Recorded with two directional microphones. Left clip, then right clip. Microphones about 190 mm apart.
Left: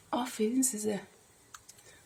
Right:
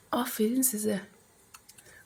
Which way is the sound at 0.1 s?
15° right (ahead or behind).